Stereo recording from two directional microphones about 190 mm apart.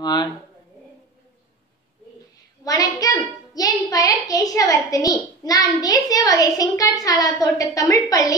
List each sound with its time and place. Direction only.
0.0 s a child's voice: 20° left (ahead or behind)
2.6 s a child's voice: 20° left (ahead or behind)